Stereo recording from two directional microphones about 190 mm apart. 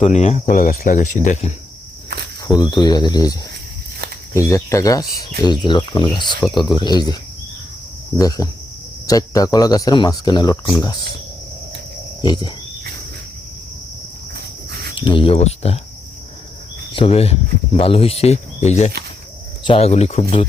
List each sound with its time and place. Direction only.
0.0 s speech: 35° left (ahead or behind)
2.6 s speech: 20° left (ahead or behind)
4.4 s speech: 15° left (ahead or behind)
12.2 s speech: 20° left (ahead or behind)
14.9 s speech: 25° left (ahead or behind)
16.9 s speech: 30° left (ahead or behind)